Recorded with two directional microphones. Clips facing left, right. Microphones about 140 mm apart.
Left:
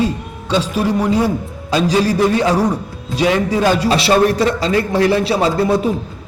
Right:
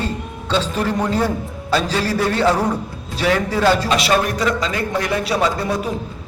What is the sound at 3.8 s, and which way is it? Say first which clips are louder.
A man's voice: left 5 dB; 30° left (ahead or behind).